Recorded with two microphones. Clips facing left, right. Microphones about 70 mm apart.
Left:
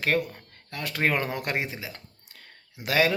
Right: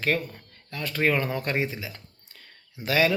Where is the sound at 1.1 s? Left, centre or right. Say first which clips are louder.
Right 2 dB; left.